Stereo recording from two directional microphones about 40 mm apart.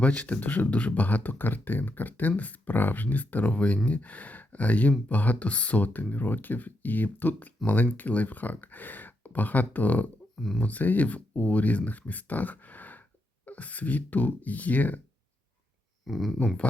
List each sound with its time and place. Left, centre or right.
0.0 s speech: left
10.3 s speech: centre
10.6 s speech: left
16.0 s speech: centre